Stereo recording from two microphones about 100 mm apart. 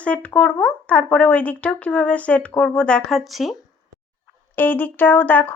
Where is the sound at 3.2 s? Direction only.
Centre (ahead or behind).